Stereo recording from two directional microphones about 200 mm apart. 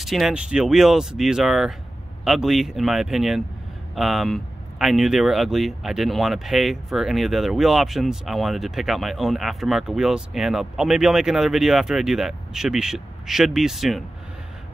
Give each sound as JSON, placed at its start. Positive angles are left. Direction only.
{"t": 0.0, "sound": "speech", "side_deg": 0}